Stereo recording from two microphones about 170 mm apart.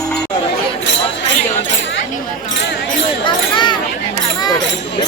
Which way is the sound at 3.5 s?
25° left (ahead or behind).